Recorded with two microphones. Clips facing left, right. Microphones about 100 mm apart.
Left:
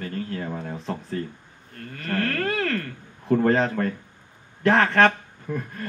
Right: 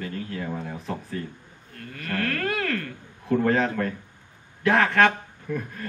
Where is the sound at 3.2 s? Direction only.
35° left (ahead or behind).